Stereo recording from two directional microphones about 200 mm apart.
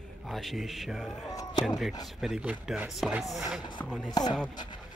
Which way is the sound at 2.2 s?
Centre (ahead or behind).